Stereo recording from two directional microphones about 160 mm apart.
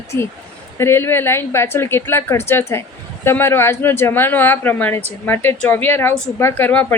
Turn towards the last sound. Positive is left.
turn(degrees=10)  # may be behind; listen again after turning